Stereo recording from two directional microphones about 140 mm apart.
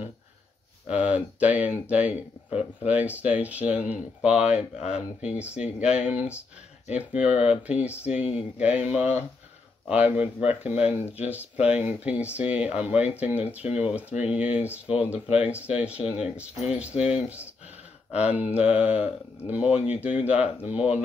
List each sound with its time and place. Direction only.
0.8 s speech: 10° right (ahead or behind)
8.2 s speech: 45° left (ahead or behind)
8.5 s speech: 10° right (ahead or behind)